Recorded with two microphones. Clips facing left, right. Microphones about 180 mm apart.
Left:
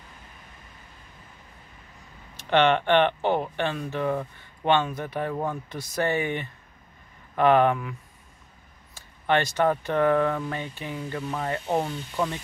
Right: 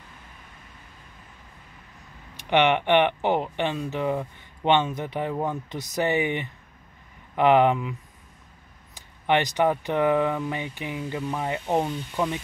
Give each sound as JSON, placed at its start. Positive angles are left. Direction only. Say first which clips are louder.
{"t": 2.3, "sound": "speech", "louder": "even", "side_deg": -15}
{"t": 8.9, "sound": "speech", "louder": "right 1 dB", "side_deg": -15}